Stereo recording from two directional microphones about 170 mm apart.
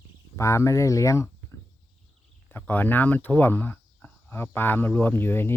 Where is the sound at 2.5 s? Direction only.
10° left (ahead or behind).